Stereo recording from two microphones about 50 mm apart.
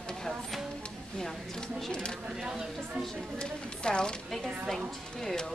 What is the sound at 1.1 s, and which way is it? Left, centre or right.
Speech, centre.